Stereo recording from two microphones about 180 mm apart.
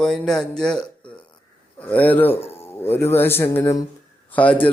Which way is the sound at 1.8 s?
10° left (ahead or behind).